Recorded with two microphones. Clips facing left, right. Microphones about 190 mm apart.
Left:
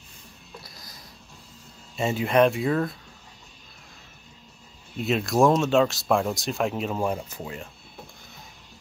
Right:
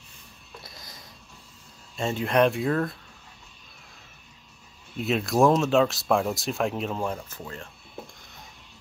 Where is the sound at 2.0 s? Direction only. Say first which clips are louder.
Left 2 dB; 5° left (ahead or behind).